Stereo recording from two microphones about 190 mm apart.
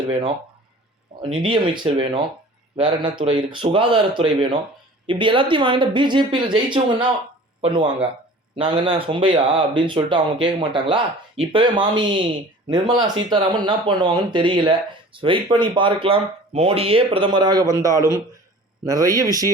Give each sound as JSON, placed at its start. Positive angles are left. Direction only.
{"t": 1.2, "sound": "speech", "side_deg": -25}